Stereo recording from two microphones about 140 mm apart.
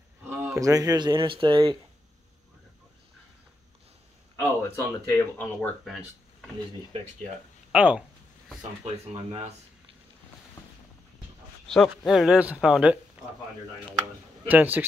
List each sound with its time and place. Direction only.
0.3 s speech: 20° right (ahead or behind)
4.4 s speech: 15° left (ahead or behind)
5.9 s speech: centre (ahead or behind)
7.7 s speech: 10° right (ahead or behind)
8.8 s speech: 50° right (ahead or behind)
11.7 s speech: centre (ahead or behind)
14.5 s a man's voice: 10° right (ahead or behind)